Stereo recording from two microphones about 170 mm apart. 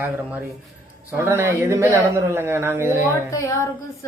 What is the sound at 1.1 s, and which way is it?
Speech, 15° right (ahead or behind).